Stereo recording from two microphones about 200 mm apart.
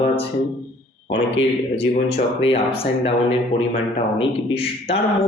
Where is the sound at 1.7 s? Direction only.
30° left (ahead or behind).